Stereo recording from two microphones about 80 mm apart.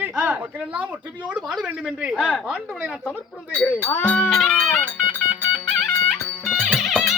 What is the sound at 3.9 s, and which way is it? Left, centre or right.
Speech, centre.